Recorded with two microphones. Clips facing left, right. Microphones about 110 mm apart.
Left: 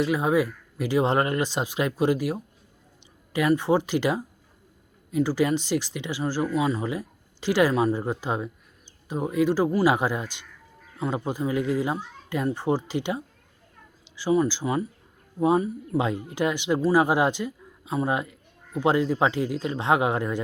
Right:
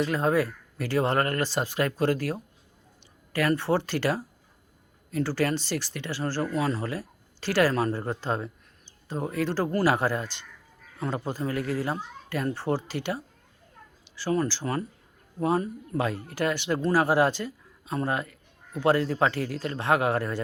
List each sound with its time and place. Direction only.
0.0 s speech: 10° left (ahead or behind)